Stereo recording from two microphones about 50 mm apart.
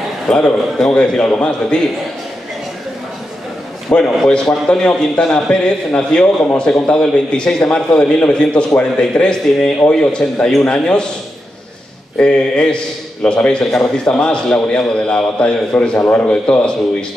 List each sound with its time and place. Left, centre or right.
0.3 s a man's voice: centre
4.3 s a man's voice: centre
12.2 s a man's voice: centre